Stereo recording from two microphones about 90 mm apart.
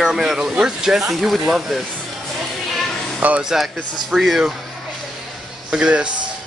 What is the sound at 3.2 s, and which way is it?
Speech, 15° right (ahead or behind).